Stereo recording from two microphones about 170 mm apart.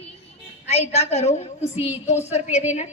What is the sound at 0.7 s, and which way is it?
A woman's voice, 40° left (ahead or behind).